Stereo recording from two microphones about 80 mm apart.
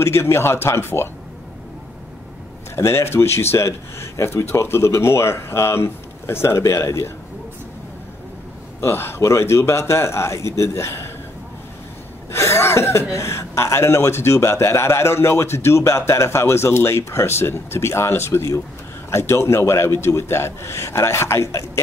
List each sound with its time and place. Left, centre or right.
0.0 s speech: left
2.7 s speech: left
8.8 s speech: left
12.3 s speech: left